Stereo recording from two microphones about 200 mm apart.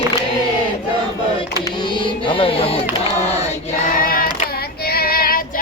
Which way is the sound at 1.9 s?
25° left (ahead or behind).